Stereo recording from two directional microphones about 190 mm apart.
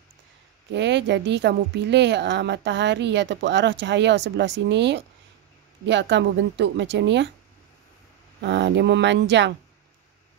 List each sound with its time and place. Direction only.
0.7 s a woman's voice: 65° right (ahead or behind)
8.4 s a woman's voice: 65° right (ahead or behind)